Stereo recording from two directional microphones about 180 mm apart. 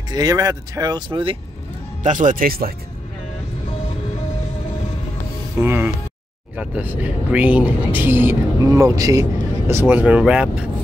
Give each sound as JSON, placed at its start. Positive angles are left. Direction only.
{"t": 0.1, "sound": "speech", "side_deg": -20}
{"t": 2.0, "sound": "speech", "side_deg": -45}
{"t": 5.6, "sound": "speech", "side_deg": -10}